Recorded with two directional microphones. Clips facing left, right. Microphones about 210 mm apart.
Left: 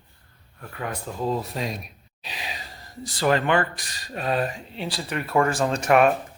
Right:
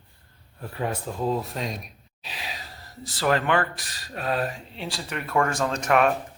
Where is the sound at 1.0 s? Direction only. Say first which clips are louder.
Left 3 dB; centre (ahead or behind).